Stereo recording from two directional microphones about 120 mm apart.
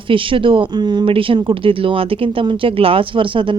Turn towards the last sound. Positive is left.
turn(degrees=-45)  # may be behind; listen again after turning